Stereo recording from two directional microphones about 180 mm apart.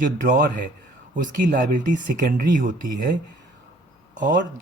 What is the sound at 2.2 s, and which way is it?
Speech, 50° right (ahead or behind).